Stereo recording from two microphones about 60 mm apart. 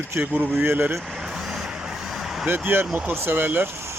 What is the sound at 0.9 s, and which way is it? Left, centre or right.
Speech, centre.